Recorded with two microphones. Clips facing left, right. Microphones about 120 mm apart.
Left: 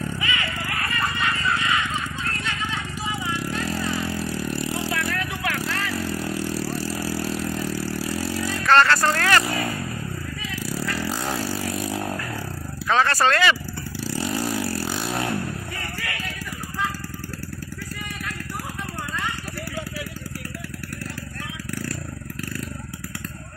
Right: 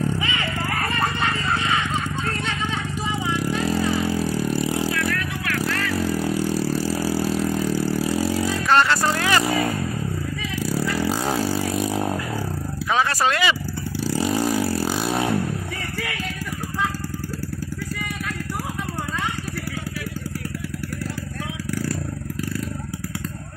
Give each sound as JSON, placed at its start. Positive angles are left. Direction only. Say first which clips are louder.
{"t": 0.9, "sound": "vehicle", "louder": "even", "side_deg": -30}
{"t": 3.9, "sound": "vehicle", "louder": "right 5 dB", "side_deg": -30}
{"t": 4.9, "sound": "vehicle", "louder": "right 2 dB", "side_deg": 30}
{"t": 6.0, "sound": "vehicle", "louder": "right 5 dB", "side_deg": -30}
{"t": 8.6, "sound": "music", "louder": "left 2 dB", "side_deg": -10}
{"t": 10.7, "sound": "vehicle", "louder": "right 5 dB", "side_deg": -30}
{"t": 12.9, "sound": "a sound", "louder": "left 1 dB", "side_deg": -5}
{"t": 14.2, "sound": "vehicle", "louder": "right 4 dB", "side_deg": -35}